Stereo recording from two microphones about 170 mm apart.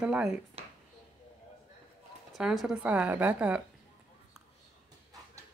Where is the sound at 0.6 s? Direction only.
35° right (ahead or behind).